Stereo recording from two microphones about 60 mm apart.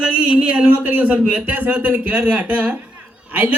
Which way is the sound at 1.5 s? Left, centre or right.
Right.